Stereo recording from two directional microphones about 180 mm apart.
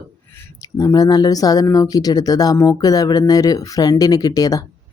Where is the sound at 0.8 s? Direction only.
20° left (ahead or behind).